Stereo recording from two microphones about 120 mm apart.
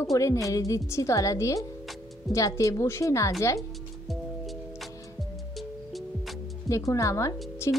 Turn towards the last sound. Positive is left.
turn(degrees=20)  # may be behind; listen again after turning